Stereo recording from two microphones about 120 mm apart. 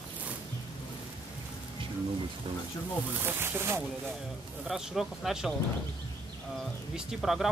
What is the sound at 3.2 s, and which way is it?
Speech, 20° right (ahead or behind).